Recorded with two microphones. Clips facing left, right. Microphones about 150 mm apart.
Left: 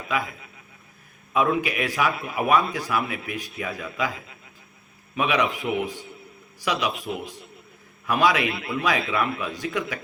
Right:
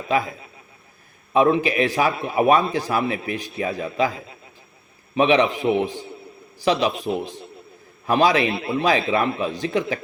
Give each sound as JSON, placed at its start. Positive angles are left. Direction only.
{"t": 0.0, "sound": "a man's voice", "side_deg": -30}